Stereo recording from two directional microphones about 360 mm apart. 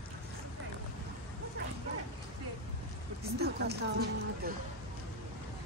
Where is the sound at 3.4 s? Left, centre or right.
Right.